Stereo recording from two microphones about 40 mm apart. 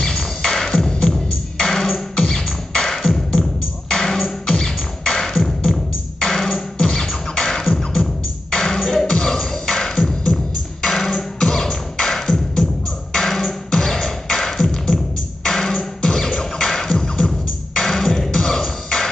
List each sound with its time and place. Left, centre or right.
0.0 s music: centre
5.3 s music: centre
13.2 s beatboxing: centre
15.4 s music: centre